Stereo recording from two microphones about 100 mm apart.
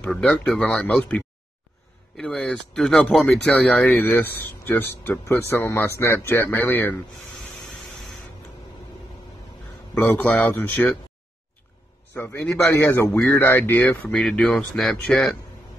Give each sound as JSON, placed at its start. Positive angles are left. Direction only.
{"t": 0.1, "sound": "speech", "side_deg": 5}
{"t": 9.9, "sound": "speech", "side_deg": 20}
{"t": 12.1, "sound": "a man's voice", "side_deg": 20}
{"t": 14.1, "sound": "speech", "side_deg": 5}